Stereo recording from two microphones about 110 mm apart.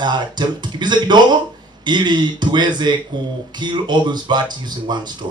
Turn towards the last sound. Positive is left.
turn(degrees=-40)  # may be behind; listen again after turning